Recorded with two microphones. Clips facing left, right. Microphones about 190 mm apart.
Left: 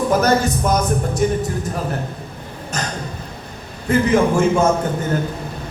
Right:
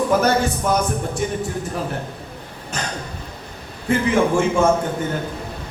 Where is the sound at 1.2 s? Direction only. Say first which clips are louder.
Left 6 dB; 40° left (ahead or behind).